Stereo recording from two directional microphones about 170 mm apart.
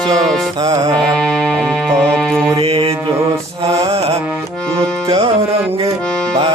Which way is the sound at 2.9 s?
15° right (ahead or behind).